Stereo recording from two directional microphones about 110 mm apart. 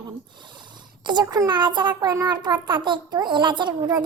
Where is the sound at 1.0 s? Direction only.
40° right (ahead or behind).